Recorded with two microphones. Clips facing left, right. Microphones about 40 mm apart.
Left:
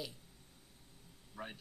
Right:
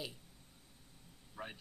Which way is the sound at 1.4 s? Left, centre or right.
Right.